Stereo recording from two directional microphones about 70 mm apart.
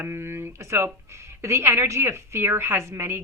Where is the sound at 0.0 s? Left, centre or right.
Right.